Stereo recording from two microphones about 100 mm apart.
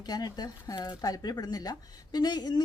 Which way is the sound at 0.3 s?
40° left (ahead or behind).